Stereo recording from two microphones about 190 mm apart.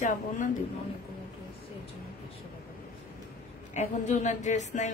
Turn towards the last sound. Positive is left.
turn(degrees=40)  # may be behind; listen again after turning